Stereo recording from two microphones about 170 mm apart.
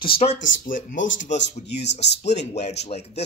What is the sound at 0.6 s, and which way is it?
Speech, 50° left (ahead or behind).